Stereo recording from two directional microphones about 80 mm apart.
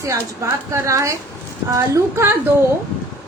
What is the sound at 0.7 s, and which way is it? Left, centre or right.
A woman's voice, right.